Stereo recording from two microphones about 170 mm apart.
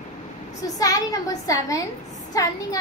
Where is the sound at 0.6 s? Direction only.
20° left (ahead or behind).